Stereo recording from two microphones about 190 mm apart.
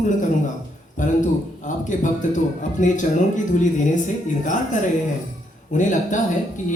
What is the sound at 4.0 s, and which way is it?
Speech, 40° left (ahead or behind).